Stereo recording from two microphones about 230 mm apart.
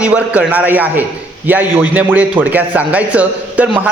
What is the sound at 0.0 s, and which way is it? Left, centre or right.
Speech, centre.